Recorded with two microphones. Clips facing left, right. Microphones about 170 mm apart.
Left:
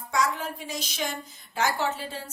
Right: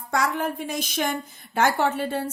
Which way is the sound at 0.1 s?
55° right (ahead or behind).